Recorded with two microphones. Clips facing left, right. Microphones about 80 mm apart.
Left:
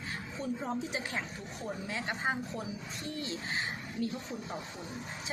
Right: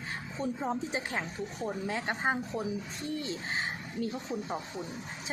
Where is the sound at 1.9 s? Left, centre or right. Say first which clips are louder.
Right 2 dB; right.